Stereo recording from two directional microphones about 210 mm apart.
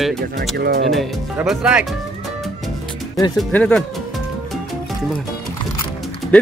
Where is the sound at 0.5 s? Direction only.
50° right (ahead or behind).